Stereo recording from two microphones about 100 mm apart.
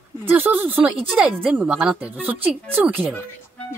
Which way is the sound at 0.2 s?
20° right (ahead or behind).